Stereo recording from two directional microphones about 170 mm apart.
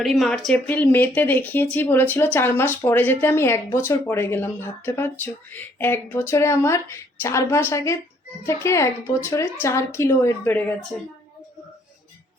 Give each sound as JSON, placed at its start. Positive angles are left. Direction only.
{"t": 0.0, "sound": "speech", "side_deg": 0}